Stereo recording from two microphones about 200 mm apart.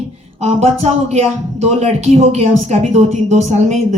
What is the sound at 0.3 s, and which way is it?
A woman's voice, 30° right (ahead or behind).